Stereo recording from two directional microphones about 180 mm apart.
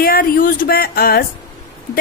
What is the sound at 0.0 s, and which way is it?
A woman's voice, 55° left (ahead or behind).